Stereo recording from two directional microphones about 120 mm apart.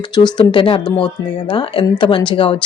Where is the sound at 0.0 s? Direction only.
40° left (ahead or behind).